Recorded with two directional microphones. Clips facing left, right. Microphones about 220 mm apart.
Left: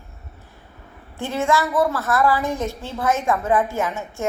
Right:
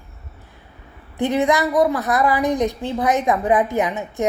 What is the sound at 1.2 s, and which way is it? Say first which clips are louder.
A woman's voice: right 4 dB; 15° right (ahead or behind).